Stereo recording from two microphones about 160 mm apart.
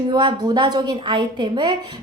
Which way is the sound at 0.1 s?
30° right (ahead or behind).